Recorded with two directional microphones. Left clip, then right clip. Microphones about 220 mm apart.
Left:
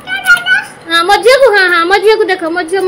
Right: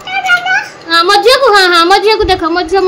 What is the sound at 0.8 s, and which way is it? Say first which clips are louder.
A woman's voice: right 1 dB; 10° left (ahead or behind).